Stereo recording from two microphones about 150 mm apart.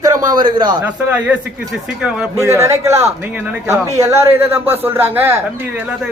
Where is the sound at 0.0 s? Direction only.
25° right (ahead or behind).